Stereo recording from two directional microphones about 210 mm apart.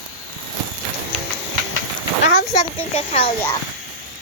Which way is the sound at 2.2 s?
55° left (ahead or behind).